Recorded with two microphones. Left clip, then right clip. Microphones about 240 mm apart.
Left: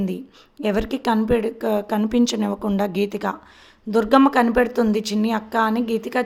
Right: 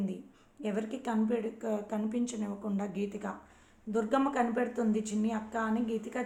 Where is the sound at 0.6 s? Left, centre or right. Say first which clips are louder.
Left 14 dB; left.